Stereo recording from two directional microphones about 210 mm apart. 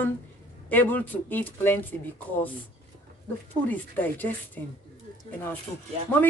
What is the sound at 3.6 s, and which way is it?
Speech, 10° left (ahead or behind).